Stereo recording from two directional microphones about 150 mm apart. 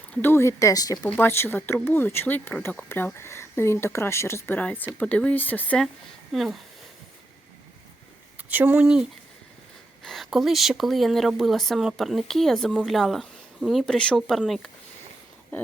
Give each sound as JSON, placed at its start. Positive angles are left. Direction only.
{"t": 0.2, "sound": "speech", "side_deg": 15}
{"t": 1.1, "sound": "speech", "side_deg": 15}
{"t": 8.4, "sound": "speech", "side_deg": -10}